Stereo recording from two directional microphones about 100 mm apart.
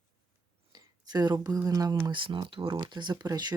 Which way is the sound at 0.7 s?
40° right (ahead or behind).